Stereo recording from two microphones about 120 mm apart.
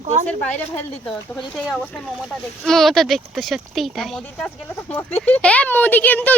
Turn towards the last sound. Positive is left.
turn(degrees=15)  # may be behind; listen again after turning